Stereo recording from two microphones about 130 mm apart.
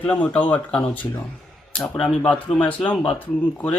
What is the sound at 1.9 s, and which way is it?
Speech, 10° left (ahead or behind).